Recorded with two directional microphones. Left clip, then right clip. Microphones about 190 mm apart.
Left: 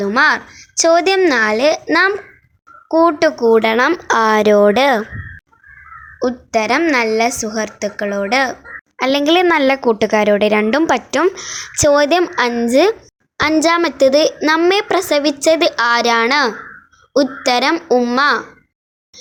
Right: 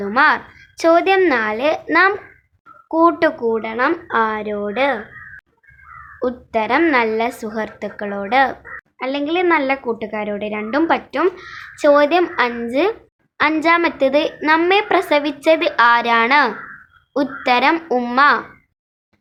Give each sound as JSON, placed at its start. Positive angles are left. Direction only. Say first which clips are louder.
{"t": 0.0, "sound": "a woman's voice", "louder": "left 1 dB", "side_deg": 25}
{"t": 3.5, "sound": "speech", "louder": "left 6 dB", "side_deg": 50}
{"t": 6.1, "sound": "a woman's voice", "louder": "left 3 dB", "side_deg": 20}
{"t": 9.0, "sound": "a woman's voice", "louder": "left 7 dB", "side_deg": 45}